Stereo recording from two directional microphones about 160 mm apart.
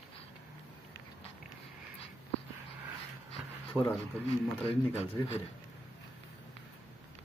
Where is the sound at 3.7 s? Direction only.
10° right (ahead or behind).